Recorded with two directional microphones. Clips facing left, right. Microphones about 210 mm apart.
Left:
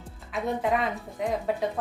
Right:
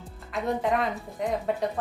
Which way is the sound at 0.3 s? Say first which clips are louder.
Even; centre (ahead or behind).